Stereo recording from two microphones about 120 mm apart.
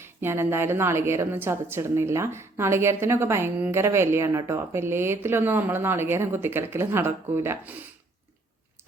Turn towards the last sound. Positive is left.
turn(degrees=-20)  # may be behind; listen again after turning